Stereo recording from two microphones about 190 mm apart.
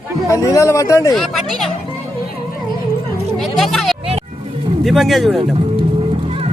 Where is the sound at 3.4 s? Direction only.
Centre (ahead or behind).